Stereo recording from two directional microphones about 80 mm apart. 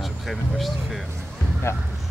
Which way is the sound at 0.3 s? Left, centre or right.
Centre.